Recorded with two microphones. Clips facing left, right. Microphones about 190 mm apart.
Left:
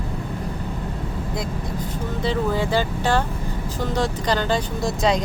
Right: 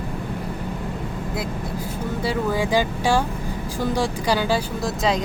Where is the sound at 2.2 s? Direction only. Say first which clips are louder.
Left 1 dB; 10° right (ahead or behind).